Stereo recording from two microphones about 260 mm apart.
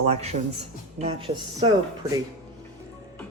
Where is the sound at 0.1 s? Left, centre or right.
Right.